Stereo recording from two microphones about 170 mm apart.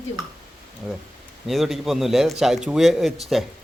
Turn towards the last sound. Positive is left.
turn(degrees=0)  # may be behind; listen again after turning